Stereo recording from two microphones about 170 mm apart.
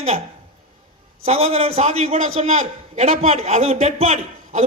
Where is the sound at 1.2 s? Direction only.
40° right (ahead or behind).